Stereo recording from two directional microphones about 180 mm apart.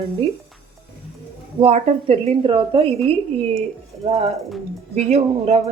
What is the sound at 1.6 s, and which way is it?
Speech, 35° right (ahead or behind).